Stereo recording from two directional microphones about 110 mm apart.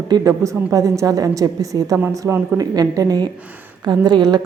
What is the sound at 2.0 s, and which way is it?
Speech, 15° right (ahead or behind).